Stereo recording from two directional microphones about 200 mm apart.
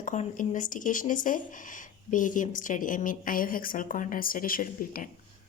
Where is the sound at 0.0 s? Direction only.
40° left (ahead or behind).